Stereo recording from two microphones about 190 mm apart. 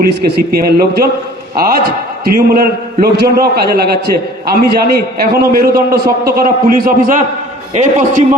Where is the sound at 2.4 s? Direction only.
50° right (ahead or behind).